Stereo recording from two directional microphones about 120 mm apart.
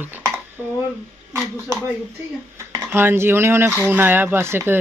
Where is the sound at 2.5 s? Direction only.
20° right (ahead or behind).